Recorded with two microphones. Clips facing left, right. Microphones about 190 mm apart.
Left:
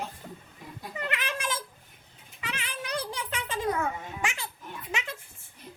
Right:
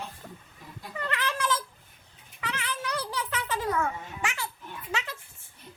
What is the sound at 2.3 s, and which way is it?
A child's voice, 20° left (ahead or behind).